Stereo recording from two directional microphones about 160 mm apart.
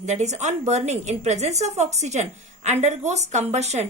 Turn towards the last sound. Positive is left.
turn(degrees=-45)  # may be behind; listen again after turning